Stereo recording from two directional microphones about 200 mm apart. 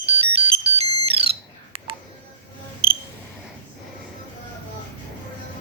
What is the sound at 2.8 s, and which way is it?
Camera, 30° right (ahead or behind).